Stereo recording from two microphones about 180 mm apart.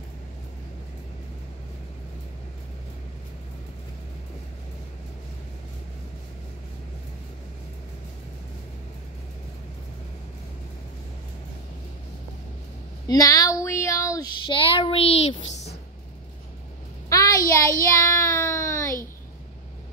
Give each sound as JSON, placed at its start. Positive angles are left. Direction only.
{"t": 13.0, "sound": "child singing", "side_deg": 20}
{"t": 17.5, "sound": "child singing", "side_deg": 15}